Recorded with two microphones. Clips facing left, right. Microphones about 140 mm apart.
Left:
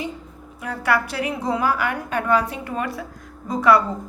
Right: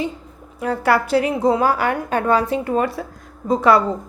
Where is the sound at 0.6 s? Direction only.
35° right (ahead or behind).